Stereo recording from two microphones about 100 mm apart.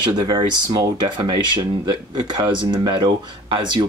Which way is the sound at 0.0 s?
60° right (ahead or behind).